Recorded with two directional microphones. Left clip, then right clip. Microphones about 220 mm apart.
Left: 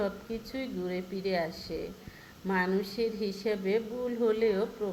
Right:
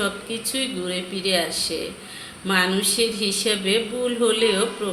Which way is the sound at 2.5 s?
90° right.